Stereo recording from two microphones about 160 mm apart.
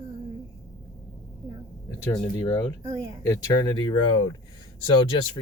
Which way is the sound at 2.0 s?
25° left (ahead or behind).